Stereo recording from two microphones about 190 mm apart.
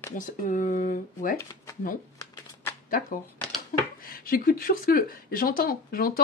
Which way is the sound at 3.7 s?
50° left (ahead or behind).